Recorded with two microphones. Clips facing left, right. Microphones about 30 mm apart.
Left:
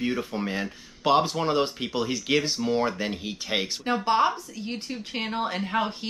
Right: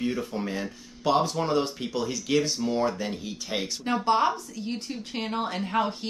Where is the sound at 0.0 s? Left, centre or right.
Left.